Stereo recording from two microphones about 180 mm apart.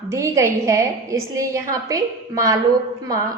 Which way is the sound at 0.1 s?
15° right (ahead or behind).